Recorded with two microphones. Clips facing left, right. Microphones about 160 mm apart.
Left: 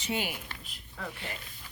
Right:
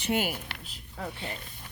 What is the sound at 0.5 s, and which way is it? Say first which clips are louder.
Speech: right 3 dB; 75° right (ahead or behind).